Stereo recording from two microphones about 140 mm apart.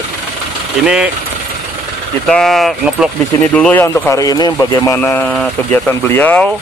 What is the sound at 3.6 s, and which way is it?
Speech, 10° left (ahead or behind).